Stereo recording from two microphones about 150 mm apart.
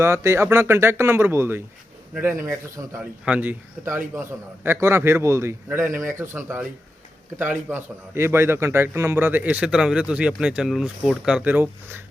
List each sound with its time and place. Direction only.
0.0 s a man's voice: 20° right (ahead or behind)